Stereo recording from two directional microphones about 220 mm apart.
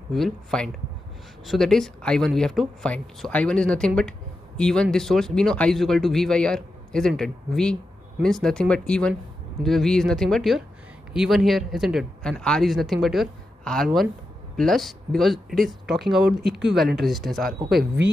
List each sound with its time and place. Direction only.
0.1 s speech: centre (ahead or behind)